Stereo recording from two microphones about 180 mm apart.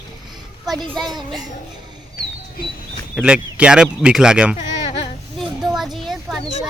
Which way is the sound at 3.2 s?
5° right (ahead or behind).